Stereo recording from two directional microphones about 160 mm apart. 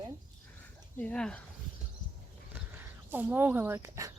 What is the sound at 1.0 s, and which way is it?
Speech, 5° left (ahead or behind).